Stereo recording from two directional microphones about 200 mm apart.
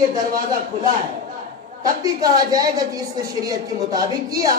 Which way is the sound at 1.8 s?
20° right (ahead or behind).